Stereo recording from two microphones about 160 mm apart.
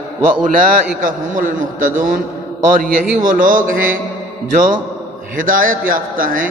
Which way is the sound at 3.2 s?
55° right (ahead or behind).